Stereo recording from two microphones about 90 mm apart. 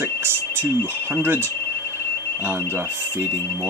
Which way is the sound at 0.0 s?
25° right (ahead or behind).